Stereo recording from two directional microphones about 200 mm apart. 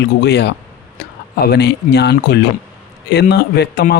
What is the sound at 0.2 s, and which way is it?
Speech, 55° left (ahead or behind).